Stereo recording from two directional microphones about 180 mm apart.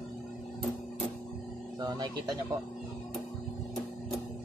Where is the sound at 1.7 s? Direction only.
25° right (ahead or behind).